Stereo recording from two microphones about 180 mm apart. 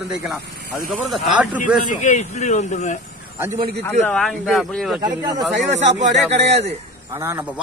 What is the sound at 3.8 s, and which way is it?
A man's voice, 5° left (ahead or behind).